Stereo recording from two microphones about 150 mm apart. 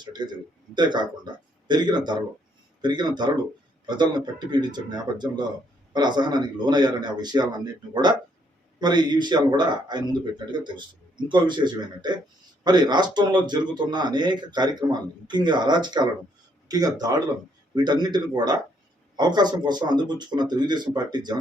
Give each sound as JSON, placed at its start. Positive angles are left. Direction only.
{"t": 0.0, "sound": "a man's voice", "side_deg": -30}